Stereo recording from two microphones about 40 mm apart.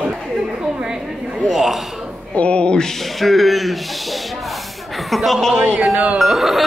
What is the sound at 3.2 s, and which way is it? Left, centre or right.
Speech, centre.